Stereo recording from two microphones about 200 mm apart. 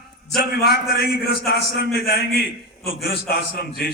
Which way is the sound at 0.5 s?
50° left (ahead or behind).